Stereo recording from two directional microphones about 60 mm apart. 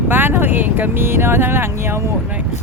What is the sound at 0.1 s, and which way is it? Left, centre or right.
Speech, right.